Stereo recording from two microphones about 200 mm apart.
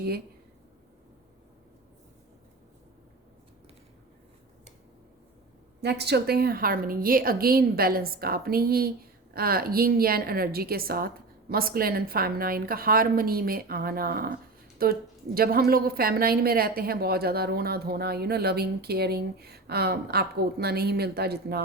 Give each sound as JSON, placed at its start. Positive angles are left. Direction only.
{"t": 5.8, "sound": "a woman's voice", "side_deg": -55}